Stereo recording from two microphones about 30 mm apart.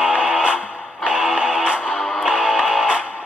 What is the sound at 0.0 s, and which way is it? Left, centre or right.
Music, right.